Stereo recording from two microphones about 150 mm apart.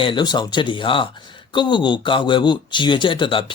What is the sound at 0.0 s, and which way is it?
Speech, 30° left (ahead or behind).